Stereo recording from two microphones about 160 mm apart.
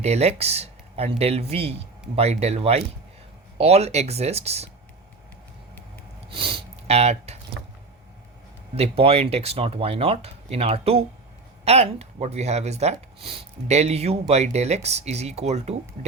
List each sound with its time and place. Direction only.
0.0 s speech: 40° right (ahead or behind)
6.2 s sniff: 35° right (ahead or behind)
8.7 s speech: 40° right (ahead or behind)